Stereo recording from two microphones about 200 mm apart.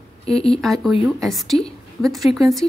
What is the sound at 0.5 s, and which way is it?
A woman's voice, centre (ahead or behind).